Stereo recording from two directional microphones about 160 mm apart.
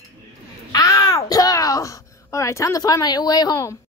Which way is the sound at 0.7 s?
20° left (ahead or behind).